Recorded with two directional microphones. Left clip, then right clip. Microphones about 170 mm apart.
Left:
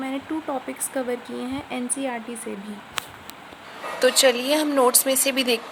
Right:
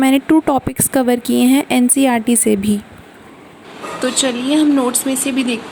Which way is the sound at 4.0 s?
35° left (ahead or behind).